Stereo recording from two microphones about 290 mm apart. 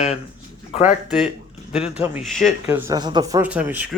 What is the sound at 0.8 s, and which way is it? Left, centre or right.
A man's voice, centre.